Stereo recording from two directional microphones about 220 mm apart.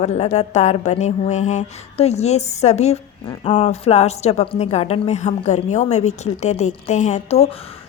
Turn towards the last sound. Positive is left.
turn(degrees=30)  # may be behind; listen again after turning